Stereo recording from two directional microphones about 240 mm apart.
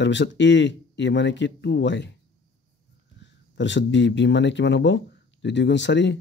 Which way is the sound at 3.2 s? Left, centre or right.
Left.